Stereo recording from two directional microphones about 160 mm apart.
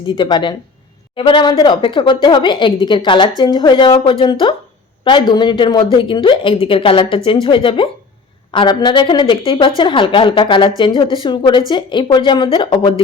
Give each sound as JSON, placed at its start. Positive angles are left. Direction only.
{"t": 0.2, "sound": "a woman's voice", "side_deg": 30}